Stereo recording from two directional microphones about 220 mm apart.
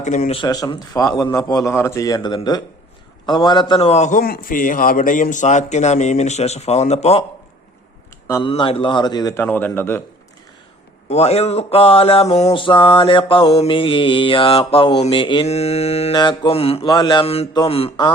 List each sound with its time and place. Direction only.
0.0 s a man's voice: 35° left (ahead or behind)
0.4 s a man's voice: 15° left (ahead or behind)
8.3 s a man's voice: 20° left (ahead or behind)
11.1 s mantra: 30° left (ahead or behind)